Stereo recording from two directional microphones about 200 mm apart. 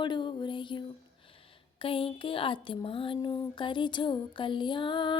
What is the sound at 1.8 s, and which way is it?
Female singing, 25° left (ahead or behind).